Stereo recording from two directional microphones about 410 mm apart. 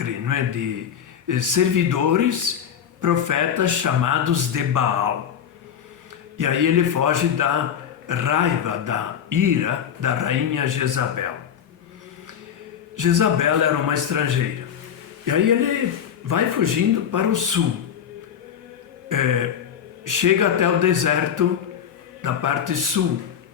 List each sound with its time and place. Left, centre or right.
0.0 s a sound: right
1.3 s speech: right
6.3 s speech: right
13.0 s speech: right
19.0 s a sound: right
20.1 s speech: right